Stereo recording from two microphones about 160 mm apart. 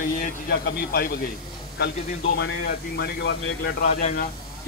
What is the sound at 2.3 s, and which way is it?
Speech, 75° left (ahead or behind).